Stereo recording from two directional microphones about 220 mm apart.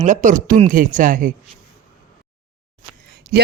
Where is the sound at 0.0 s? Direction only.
35° right (ahead or behind).